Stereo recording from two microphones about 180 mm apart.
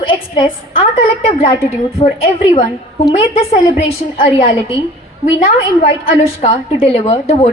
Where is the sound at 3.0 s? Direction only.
20° left (ahead or behind).